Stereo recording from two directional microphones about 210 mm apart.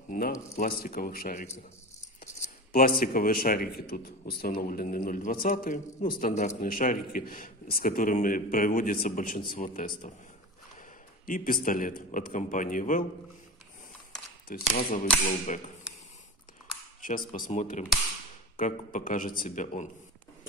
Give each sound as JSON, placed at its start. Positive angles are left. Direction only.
{"t": 0.1, "sound": "a man's voice", "side_deg": 40}
{"t": 11.2, "sound": "a man's voice", "side_deg": 40}
{"t": 14.5, "sound": "a man's voice", "side_deg": 40}
{"t": 17.3, "sound": "a man's voice", "side_deg": 35}